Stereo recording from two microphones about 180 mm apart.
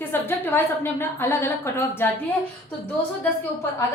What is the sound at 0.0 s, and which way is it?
A woman's voice, 10° left (ahead or behind).